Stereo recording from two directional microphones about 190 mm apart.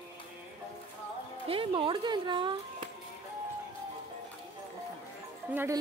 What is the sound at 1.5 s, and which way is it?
Speech, 30° right (ahead or behind).